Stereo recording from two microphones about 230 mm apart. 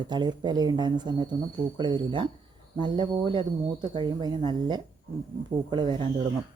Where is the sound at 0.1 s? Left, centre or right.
Centre.